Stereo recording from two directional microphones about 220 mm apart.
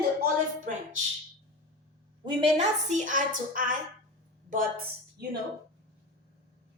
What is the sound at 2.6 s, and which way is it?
A woman's voice, 35° right (ahead or behind).